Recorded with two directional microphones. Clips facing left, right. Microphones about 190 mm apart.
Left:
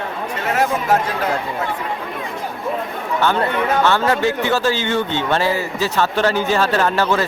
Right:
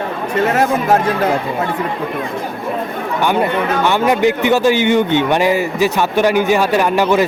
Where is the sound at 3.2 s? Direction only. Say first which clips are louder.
Right 3 dB; 15° right (ahead or behind).